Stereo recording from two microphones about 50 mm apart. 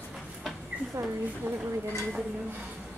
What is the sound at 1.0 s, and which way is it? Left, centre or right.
Speech, right.